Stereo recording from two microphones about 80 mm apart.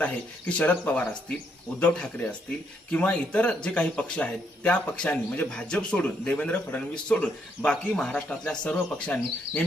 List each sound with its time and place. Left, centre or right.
0.0 s speech: centre